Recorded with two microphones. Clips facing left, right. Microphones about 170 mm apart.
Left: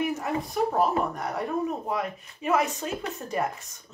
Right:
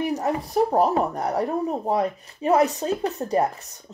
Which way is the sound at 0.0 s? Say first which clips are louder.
Right 4 dB; 35° right (ahead or behind).